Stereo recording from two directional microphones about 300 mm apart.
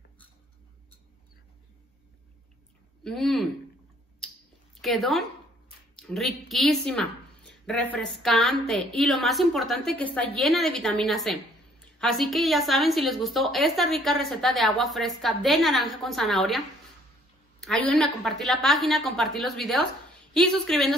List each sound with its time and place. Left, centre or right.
3.0 s a woman's voice: centre
4.8 s a woman's voice: centre